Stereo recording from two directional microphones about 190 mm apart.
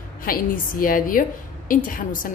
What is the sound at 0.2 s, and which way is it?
A woman's voice, 50° left (ahead or behind).